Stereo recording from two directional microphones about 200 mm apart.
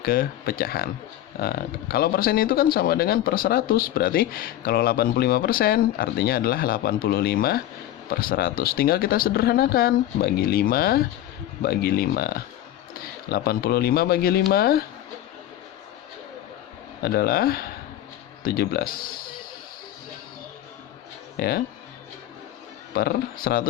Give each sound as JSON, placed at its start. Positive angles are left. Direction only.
{"t": 0.0, "sound": "speech", "side_deg": 45}
{"t": 17.0, "sound": "speech", "side_deg": 50}
{"t": 21.3, "sound": "speech", "side_deg": 50}
{"t": 23.0, "sound": "speech", "side_deg": 50}